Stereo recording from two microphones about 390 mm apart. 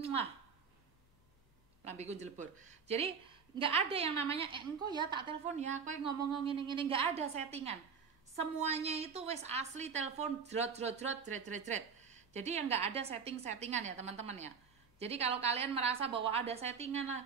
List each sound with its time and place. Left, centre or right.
1.9 s a woman's voice: centre